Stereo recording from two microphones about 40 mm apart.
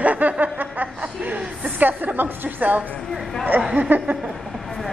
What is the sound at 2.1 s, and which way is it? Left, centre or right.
Speech, right.